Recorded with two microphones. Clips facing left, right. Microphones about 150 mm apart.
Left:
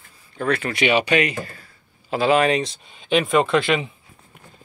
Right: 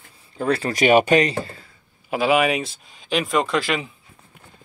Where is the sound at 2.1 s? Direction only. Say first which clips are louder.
Left 1 dB; 10° right (ahead or behind).